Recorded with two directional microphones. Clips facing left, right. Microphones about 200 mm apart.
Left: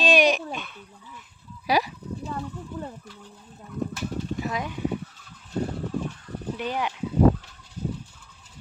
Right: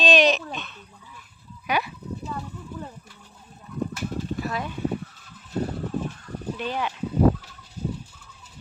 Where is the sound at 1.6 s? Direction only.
35° left (ahead or behind).